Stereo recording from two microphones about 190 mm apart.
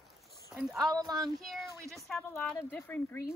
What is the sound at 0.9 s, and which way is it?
Speech, 20° right (ahead or behind).